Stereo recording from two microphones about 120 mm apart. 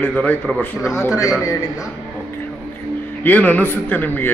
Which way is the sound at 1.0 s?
25° left (ahead or behind).